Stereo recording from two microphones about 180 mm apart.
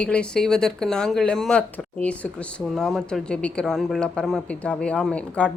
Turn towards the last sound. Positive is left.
turn(degrees=5)  # may be behind; listen again after turning